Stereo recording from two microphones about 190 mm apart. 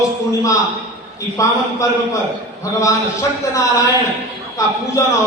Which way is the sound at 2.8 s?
15° left (ahead or behind).